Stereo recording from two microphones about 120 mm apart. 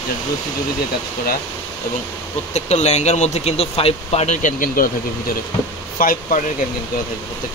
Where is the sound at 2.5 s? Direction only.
65° left (ahead or behind).